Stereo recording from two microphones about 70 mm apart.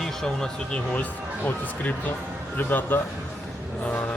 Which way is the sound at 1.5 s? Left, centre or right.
Left.